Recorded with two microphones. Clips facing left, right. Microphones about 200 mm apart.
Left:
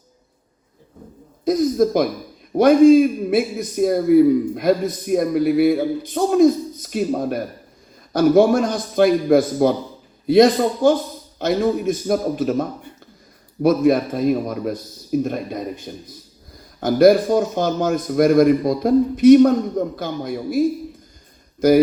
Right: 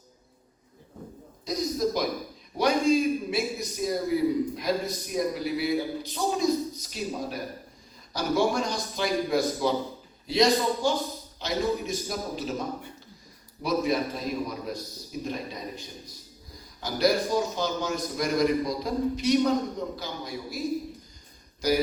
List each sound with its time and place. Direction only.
1.5 s a man's voice: 55° left (ahead or behind)
21.6 s a man's voice: 50° left (ahead or behind)